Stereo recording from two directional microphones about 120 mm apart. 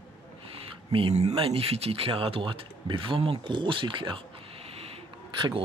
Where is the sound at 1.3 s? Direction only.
50° right (ahead or behind).